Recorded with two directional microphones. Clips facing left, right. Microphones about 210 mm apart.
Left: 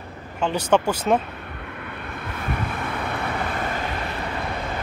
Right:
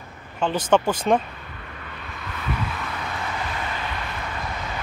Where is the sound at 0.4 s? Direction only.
10° left (ahead or behind).